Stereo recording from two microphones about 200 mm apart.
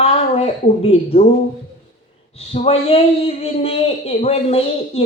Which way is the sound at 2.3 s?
30° left (ahead or behind).